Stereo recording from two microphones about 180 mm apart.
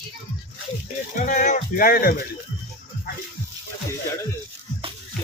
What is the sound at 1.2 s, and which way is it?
Speech, 45° left (ahead or behind).